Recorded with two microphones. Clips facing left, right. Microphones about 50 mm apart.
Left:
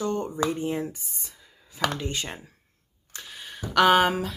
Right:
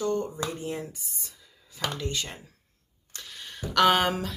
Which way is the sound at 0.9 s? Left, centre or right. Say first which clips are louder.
Left 1 dB; left.